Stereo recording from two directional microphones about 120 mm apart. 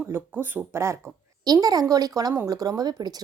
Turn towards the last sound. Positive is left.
turn(degrees=-35)  # may be behind; listen again after turning